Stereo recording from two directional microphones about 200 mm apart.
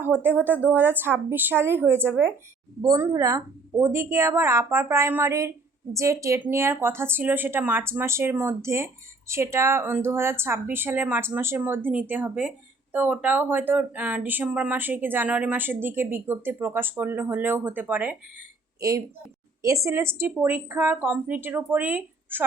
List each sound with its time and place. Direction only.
0.0 s a woman's voice: 10° right (ahead or behind)